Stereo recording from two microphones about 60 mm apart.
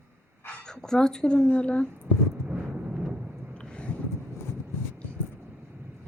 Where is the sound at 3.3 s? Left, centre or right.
Right.